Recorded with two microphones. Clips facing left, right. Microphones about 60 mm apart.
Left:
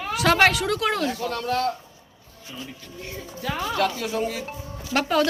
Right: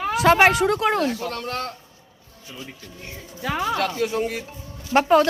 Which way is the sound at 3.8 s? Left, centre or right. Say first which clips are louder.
Right 1 dB; right.